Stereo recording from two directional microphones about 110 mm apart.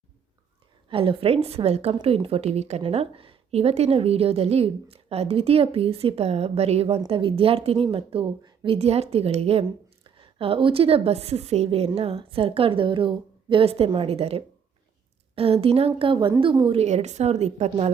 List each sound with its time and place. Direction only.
0.9 s a woman's voice: 55° right (ahead or behind)
7.1 s a woman's voice: 55° right (ahead or behind)
10.0 s a woman's voice: 55° right (ahead or behind); by 11.9 s 70° right (ahead or behind)
11.9 s a woman's voice: 60° right (ahead or behind)
16.0 s a woman's voice: 50° right (ahead or behind)
16.6 s a woman's voice: 80° right